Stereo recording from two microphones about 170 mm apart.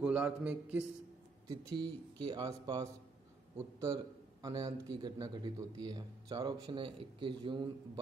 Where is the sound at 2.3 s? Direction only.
25° right (ahead or behind).